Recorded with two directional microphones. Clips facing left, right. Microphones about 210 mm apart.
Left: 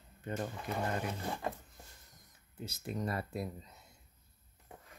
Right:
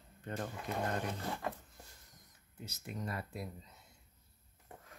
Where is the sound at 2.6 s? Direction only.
35° left (ahead or behind).